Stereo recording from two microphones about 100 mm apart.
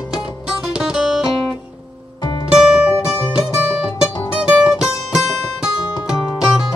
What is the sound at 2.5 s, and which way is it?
Music, 5° right (ahead or behind).